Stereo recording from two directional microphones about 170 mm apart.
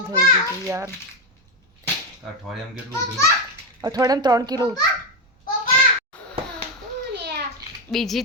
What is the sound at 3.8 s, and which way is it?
Speech, 20° right (ahead or behind).